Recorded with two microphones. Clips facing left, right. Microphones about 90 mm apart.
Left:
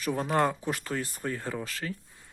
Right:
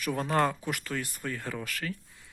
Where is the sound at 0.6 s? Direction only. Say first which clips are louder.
Left 2 dB; 30° left (ahead or behind).